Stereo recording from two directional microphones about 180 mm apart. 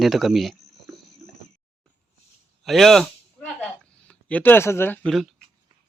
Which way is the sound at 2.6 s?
Centre (ahead or behind).